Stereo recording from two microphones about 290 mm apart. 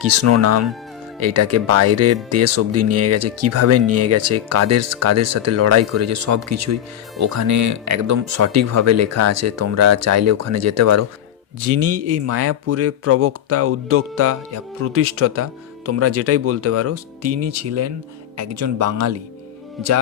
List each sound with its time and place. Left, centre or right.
0.0 s speech: right
19.8 s speech: centre